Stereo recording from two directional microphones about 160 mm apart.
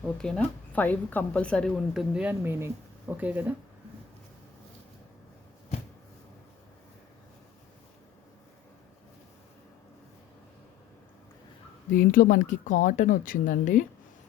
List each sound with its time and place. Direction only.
0.0 s a woman's voice: 5° left (ahead or behind)
11.9 s speech: 60° left (ahead or behind)